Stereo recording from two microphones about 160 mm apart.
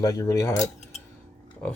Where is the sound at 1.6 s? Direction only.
10° left (ahead or behind).